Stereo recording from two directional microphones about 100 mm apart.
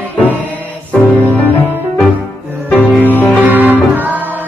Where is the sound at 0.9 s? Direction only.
15° left (ahead or behind).